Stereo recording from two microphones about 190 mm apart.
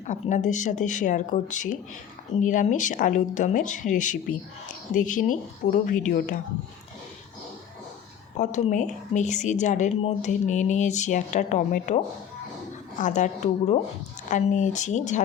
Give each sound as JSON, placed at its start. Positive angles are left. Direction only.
{"t": 0.1, "sound": "speech", "side_deg": 40}
{"t": 8.4, "sound": "speech", "side_deg": 40}
{"t": 13.0, "sound": "speech", "side_deg": 40}